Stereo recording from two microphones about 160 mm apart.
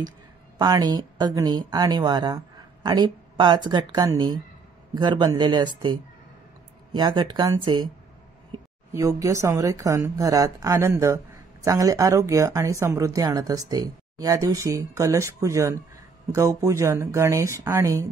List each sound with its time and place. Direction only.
0.6 s speech: 25° right (ahead or behind)
8.9 s speech: 20° right (ahead or behind)